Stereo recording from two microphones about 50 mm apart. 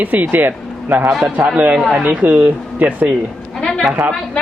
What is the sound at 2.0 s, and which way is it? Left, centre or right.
Speech, right.